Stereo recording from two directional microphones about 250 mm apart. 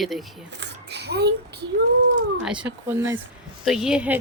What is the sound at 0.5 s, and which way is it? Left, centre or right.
A child's voice, right.